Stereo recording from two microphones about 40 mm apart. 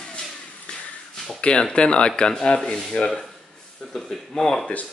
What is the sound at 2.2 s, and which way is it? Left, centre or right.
Speech, centre.